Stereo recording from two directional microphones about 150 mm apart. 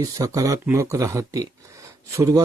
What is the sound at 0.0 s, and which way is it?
Speech, 25° right (ahead or behind).